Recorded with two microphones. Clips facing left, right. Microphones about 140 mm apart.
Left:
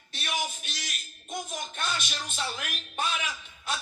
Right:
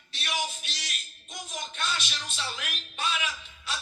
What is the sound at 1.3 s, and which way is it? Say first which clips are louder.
Speech: left 4 dB; 50° left (ahead or behind).